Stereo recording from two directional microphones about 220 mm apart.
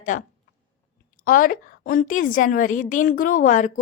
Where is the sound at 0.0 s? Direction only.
35° left (ahead or behind).